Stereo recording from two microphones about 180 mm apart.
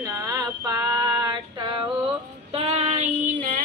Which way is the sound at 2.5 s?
35° right (ahead or behind).